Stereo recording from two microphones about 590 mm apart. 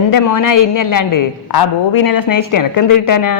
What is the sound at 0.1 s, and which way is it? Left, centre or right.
A woman's voice, left.